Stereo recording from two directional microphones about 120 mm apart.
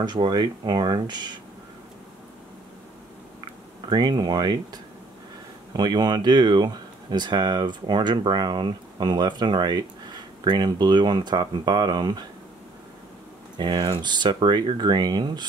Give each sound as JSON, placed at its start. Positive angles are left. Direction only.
{"t": 0.0, "sound": "speech", "side_deg": -35}
{"t": 3.9, "sound": "speech", "side_deg": -35}
{"t": 5.7, "sound": "speech", "side_deg": -35}
{"t": 13.6, "sound": "speech", "side_deg": -35}